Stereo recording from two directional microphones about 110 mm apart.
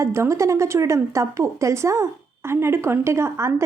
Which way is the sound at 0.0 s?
25° right (ahead or behind).